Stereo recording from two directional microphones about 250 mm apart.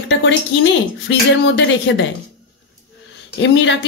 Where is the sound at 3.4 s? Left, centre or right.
Left.